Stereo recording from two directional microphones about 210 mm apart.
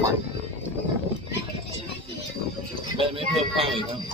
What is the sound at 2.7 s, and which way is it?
Speech, 25° right (ahead or behind).